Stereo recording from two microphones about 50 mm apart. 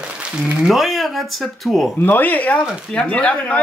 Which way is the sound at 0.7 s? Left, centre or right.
Centre.